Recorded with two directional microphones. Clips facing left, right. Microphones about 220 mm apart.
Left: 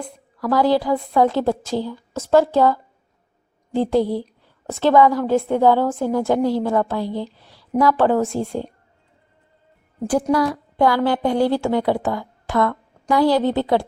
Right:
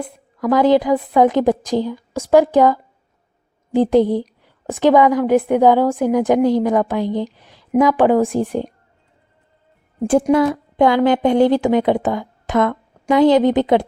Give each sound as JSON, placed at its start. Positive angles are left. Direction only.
{"t": 0.0, "sound": "a woman's voice", "side_deg": -20}
{"t": 10.0, "sound": "a woman's voice", "side_deg": -20}